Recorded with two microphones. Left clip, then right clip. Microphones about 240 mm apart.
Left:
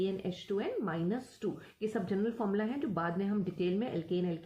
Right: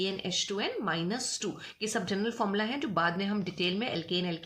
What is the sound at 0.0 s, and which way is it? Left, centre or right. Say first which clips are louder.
Speech: right 4 dB; right.